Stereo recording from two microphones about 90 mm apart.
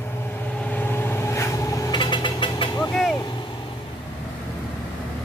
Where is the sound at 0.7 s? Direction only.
25° left (ahead or behind).